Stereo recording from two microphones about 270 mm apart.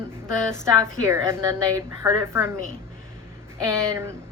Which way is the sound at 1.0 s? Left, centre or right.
Centre.